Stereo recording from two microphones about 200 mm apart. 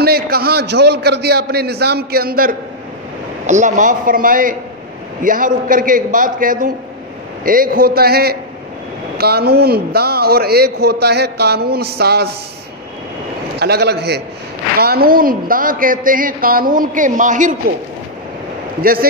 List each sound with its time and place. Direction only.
0.0 s a man's voice: 50° right (ahead or behind)
3.4 s a man's voice: 40° right (ahead or behind); by 12.4 s 55° right (ahead or behind)
13.6 s a man's voice: 55° right (ahead or behind)
18.8 s a man's voice: 50° right (ahead or behind)